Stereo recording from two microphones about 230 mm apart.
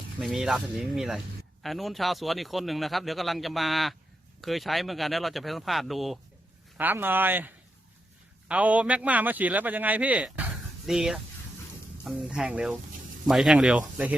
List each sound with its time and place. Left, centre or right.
0.2 s speech: centre